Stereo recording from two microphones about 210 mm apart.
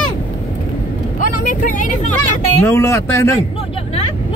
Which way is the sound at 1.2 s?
40° left (ahead or behind).